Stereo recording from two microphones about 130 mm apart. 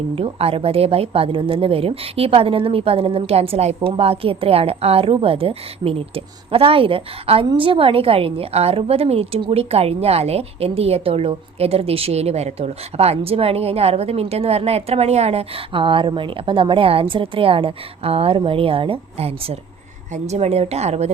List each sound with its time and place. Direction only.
0.2 s a woman's voice: 50° right (ahead or behind)
20.2 s speech: 55° right (ahead or behind)